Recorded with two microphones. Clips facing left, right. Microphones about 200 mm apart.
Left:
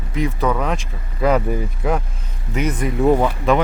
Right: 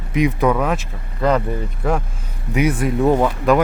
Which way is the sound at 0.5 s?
5° right (ahead or behind).